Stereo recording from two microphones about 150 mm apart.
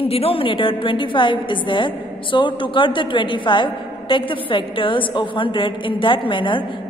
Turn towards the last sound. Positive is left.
turn(degrees=35)  # may be behind; listen again after turning